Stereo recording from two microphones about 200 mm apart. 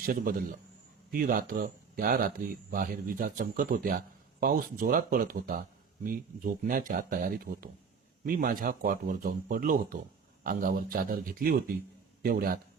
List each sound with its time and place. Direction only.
0.0 s speech: 45° right (ahead or behind)